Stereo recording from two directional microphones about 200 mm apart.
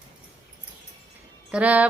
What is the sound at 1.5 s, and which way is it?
Speech, 5° right (ahead or behind).